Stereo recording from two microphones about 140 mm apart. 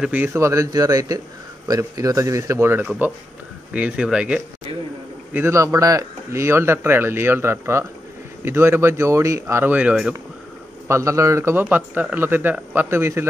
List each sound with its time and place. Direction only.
0.0 s a man's voice: 15° right (ahead or behind)
5.3 s speech: 20° right (ahead or behind)
10.9 s speech: 20° right (ahead or behind)